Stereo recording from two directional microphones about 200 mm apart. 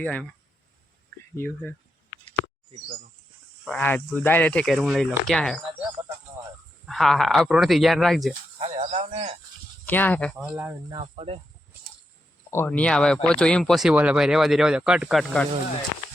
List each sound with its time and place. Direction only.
0.0 s speech: 5° left (ahead or behind)
1.4 s speech: 10° left (ahead or behind)
3.7 s speech: 10° left (ahead or behind)
6.8 s speech: centre (ahead or behind)
8.5 s speech: 30° right (ahead or behind)
9.8 s speech: 10° left (ahead or behind)
10.3 s speech: 10° right (ahead or behind)
10.9 s speech: 30° right (ahead or behind)
12.5 s speech: 10° left (ahead or behind)